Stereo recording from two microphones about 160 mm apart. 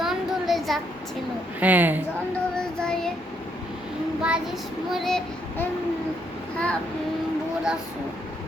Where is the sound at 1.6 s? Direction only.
10° right (ahead or behind).